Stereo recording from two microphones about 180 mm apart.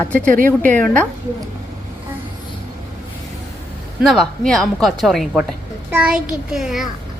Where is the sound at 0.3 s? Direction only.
50° right (ahead or behind).